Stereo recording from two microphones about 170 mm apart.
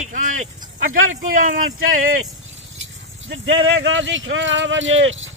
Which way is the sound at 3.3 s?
90° right.